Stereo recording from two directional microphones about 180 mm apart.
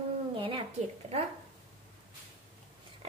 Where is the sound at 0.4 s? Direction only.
30° right (ahead or behind).